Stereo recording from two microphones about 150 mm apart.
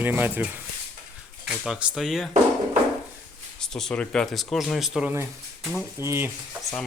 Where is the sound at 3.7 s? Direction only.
5° left (ahead or behind).